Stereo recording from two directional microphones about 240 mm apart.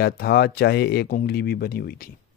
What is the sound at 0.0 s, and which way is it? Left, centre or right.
Speech, left.